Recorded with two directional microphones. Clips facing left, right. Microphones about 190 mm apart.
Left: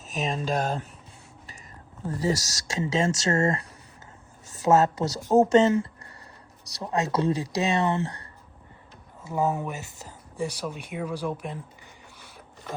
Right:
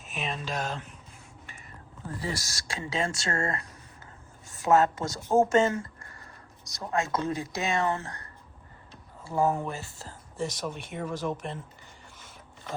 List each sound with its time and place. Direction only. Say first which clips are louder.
0.0 s speech: left 6 dB; 40° left (ahead or behind)
2.0 s speech: left 8 dB; 40° left (ahead or behind)
2.8 s speech: left 6 dB; 25° left (ahead or behind)
5.5 s speech: left 5 dB; 20° left (ahead or behind)
6.7 s speech: left 3 dB; 35° left (ahead or behind)
9.4 s speech: even; centre (ahead or behind)
9.6 s speech: left 1 dB; 15° left (ahead or behind)